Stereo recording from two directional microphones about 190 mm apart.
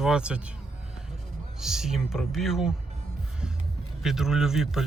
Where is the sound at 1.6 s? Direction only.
Centre (ahead or behind).